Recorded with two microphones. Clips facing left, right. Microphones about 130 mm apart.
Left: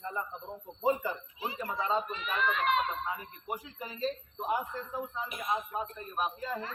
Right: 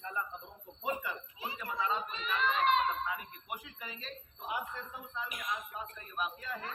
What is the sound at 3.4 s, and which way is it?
A man's voice, 35° left (ahead or behind).